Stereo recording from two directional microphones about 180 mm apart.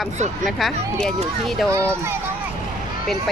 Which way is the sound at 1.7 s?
15° right (ahead or behind).